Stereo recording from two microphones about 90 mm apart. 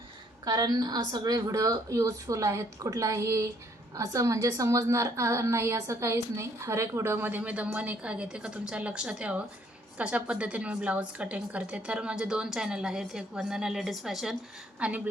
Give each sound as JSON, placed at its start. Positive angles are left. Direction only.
{"t": 0.4, "sound": "a woman's voice", "side_deg": -45}
{"t": 14.8, "sound": "a woman's voice", "side_deg": -15}